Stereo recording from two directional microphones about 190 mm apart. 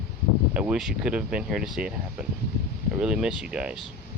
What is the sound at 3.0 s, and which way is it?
Speech, 5° right (ahead or behind).